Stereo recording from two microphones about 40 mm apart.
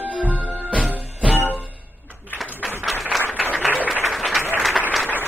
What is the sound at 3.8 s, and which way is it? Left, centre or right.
Applause, right.